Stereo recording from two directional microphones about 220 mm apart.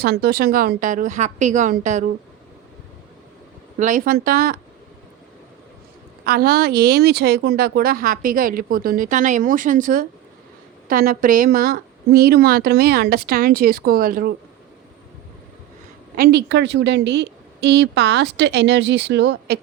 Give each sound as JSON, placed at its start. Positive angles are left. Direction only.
{"t": 0.0, "sound": "speech", "side_deg": -45}
{"t": 3.8, "sound": "speech", "side_deg": -35}
{"t": 6.2, "sound": "speech", "side_deg": -45}
{"t": 16.1, "sound": "speech", "side_deg": -45}